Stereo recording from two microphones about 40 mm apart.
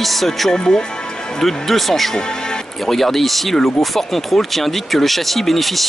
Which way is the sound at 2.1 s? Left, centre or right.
Centre.